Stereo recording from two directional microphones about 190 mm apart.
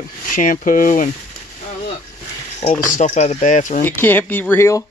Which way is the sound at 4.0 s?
10° left (ahead or behind).